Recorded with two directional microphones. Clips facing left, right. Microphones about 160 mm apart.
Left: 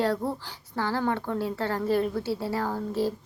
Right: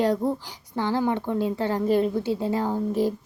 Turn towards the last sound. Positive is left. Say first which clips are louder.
# right 4 dB
turn(degrees=-15)  # may be behind; listen again after turning